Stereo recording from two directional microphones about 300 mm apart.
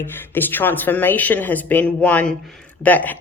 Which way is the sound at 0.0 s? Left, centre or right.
Centre.